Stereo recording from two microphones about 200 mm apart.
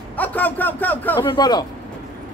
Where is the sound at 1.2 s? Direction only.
20° left (ahead or behind).